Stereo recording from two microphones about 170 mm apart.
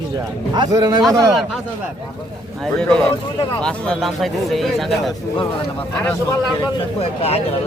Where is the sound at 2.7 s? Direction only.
5° left (ahead or behind).